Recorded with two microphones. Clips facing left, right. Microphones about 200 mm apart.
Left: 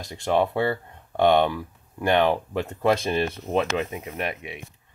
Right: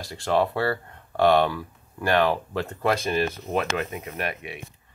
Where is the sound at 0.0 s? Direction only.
20° left (ahead or behind).